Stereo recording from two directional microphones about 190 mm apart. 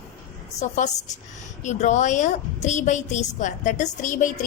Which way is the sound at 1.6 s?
40° left (ahead or behind).